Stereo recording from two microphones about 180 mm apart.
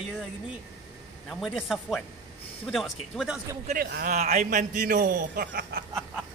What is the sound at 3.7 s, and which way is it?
Speech, 60° right (ahead or behind).